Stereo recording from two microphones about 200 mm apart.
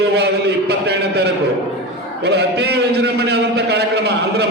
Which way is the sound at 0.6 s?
55° right (ahead or behind).